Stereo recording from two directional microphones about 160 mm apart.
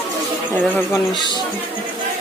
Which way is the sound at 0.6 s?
10° left (ahead or behind).